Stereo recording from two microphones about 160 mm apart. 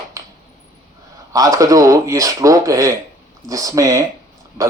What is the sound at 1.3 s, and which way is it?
Speech, 20° right (ahead or behind).